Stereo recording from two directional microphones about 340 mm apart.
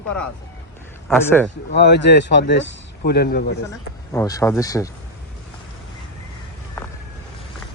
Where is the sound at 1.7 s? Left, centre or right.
Left.